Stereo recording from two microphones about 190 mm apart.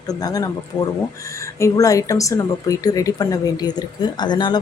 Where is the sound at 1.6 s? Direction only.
15° left (ahead or behind).